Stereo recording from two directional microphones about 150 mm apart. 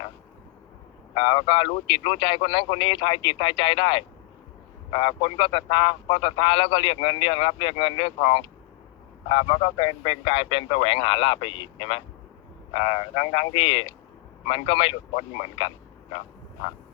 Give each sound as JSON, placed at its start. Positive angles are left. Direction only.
{"t": 1.1, "sound": "a man's voice", "side_deg": 35}